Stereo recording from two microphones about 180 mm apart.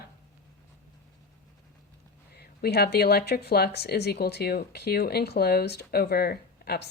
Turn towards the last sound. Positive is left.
turn(degrees=60)  # may be behind; listen again after turning